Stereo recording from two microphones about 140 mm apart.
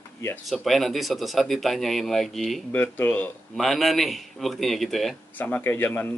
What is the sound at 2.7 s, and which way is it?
Speech, 10° left (ahead or behind).